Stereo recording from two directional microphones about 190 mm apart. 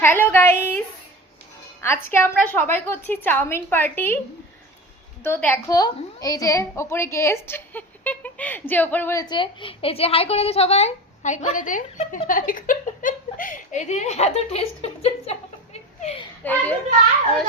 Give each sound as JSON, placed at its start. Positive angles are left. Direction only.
{"t": 0.0, "sound": "a sound", "side_deg": 10}
{"t": 1.8, "sound": "a woman's voice", "side_deg": 15}
{"t": 5.2, "sound": "a woman's voice", "side_deg": 10}
{"t": 16.4, "sound": "a woman's voice", "side_deg": 10}